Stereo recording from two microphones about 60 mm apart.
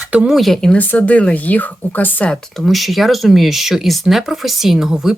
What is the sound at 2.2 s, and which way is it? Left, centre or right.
Speech, centre.